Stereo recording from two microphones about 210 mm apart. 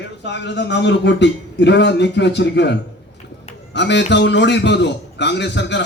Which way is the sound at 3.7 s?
55° left (ahead or behind).